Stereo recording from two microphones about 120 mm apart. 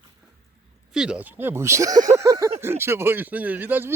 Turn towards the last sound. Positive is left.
turn(degrees=-15)  # may be behind; listen again after turning